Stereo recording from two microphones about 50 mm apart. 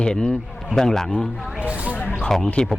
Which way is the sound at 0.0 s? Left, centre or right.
Centre.